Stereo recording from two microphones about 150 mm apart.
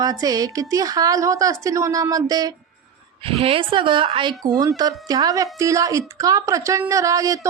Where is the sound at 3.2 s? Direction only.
40° right (ahead or behind).